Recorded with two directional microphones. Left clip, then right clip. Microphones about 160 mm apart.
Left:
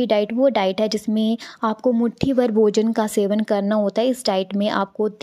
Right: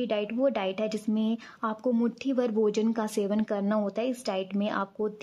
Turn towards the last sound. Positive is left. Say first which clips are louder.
# left 9 dB
turn(degrees=30)  # may be behind; listen again after turning